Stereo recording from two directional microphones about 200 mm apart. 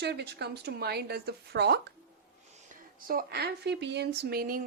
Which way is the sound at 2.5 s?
35° right (ahead or behind).